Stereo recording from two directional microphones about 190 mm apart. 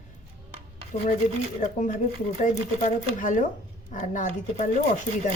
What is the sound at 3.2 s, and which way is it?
Speech, 40° left (ahead or behind).